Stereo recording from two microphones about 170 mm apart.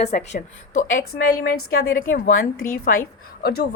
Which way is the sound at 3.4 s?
70° left (ahead or behind).